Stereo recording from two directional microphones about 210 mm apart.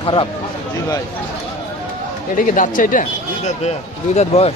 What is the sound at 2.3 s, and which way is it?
Speech, 40° left (ahead or behind).